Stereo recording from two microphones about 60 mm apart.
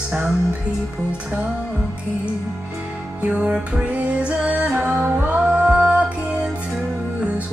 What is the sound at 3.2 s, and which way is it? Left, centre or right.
Music, right.